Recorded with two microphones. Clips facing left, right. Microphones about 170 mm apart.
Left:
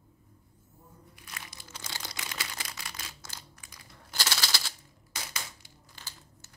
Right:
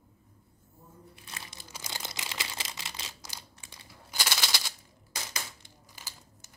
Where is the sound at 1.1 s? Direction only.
25° right (ahead or behind).